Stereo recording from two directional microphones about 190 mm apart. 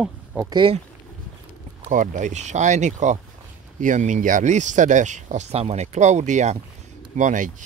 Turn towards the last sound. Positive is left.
turn(degrees=-40)  # may be behind; listen again after turning